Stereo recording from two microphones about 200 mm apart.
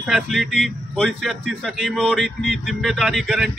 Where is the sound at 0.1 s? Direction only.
Centre (ahead or behind).